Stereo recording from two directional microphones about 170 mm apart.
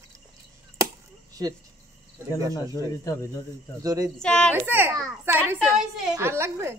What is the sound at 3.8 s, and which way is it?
Speech, 20° right (ahead or behind).